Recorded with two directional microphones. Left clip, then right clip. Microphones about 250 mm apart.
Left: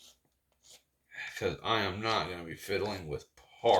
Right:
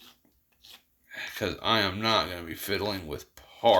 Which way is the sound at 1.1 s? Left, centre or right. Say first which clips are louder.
Right 3 dB; right.